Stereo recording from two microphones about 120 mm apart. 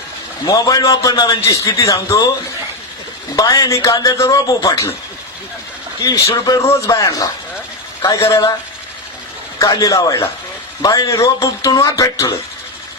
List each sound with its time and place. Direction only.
0.4 s a man's voice: 30° left (ahead or behind)
3.3 s a man's voice: 30° left (ahead or behind)
6.0 s a man's voice: 30° left (ahead or behind)
9.6 s a man's voice: 30° left (ahead or behind)